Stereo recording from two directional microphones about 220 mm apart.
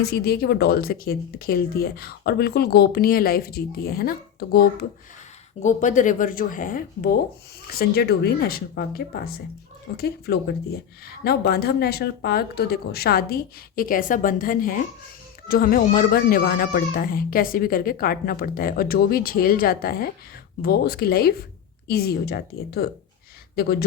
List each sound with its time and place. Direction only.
0.0 s speech: 45° left (ahead or behind)